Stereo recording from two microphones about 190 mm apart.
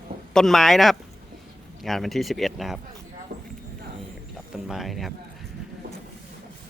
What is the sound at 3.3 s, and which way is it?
Clip-clop, 50° right (ahead or behind).